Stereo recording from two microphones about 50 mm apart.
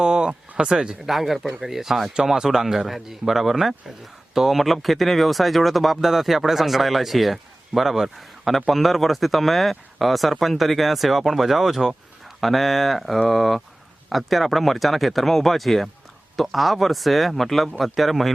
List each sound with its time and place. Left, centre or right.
0.0 s speech: centre
1.1 s speech: centre